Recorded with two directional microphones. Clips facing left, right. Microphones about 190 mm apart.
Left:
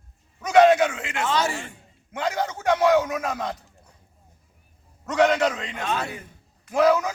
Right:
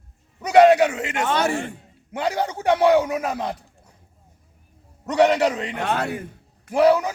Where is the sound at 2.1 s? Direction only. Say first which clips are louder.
Right 2 dB; 35° right (ahead or behind).